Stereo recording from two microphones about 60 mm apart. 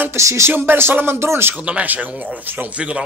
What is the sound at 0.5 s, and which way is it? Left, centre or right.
Speech, right.